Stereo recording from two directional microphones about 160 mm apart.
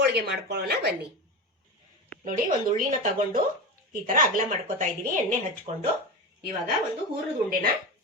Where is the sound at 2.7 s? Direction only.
50° right (ahead or behind).